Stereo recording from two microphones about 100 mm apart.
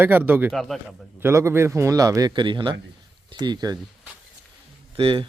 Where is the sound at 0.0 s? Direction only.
20° right (ahead or behind).